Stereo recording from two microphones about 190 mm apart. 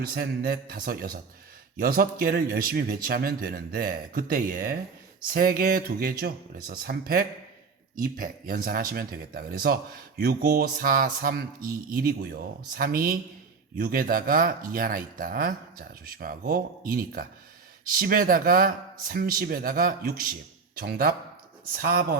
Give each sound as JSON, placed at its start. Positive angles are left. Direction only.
{"t": 0.0, "sound": "speech", "side_deg": -50}